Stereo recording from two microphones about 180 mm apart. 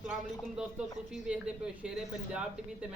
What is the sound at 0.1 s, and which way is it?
A man's voice, 5° right (ahead or behind).